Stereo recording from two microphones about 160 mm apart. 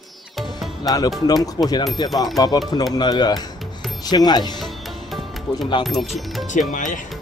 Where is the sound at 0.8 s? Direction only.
25° left (ahead or behind).